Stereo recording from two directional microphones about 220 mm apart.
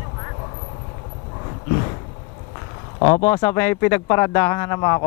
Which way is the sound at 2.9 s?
25° left (ahead or behind).